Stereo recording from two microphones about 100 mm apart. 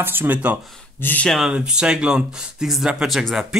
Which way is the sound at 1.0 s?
15° left (ahead or behind).